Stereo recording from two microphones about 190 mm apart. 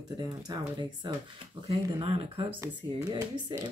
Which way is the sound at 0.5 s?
20° right (ahead or behind).